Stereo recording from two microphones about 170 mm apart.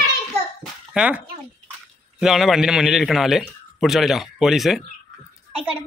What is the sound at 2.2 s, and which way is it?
Speech, centre (ahead or behind).